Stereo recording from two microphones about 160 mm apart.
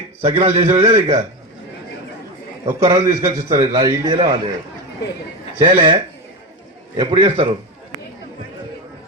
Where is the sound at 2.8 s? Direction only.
20° right (ahead or behind).